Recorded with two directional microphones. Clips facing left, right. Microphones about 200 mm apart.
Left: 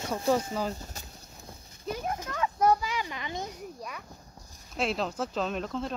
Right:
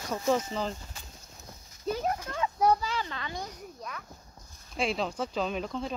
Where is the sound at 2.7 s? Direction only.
15° left (ahead or behind).